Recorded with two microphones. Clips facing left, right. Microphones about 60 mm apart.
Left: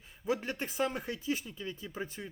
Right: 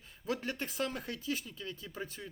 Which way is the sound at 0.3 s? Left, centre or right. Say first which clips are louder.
Left 3 dB; centre.